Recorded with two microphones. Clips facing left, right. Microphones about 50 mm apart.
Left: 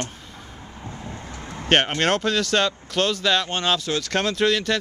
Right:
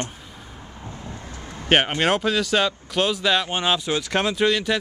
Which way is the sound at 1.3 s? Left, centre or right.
Left.